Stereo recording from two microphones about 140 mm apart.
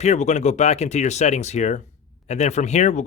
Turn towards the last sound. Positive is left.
turn(degrees=55)  # may be behind; listen again after turning